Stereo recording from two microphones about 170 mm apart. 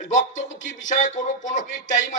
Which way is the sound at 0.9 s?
45° left (ahead or behind).